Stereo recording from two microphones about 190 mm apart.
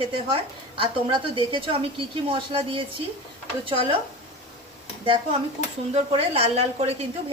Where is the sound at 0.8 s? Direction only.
30° right (ahead or behind).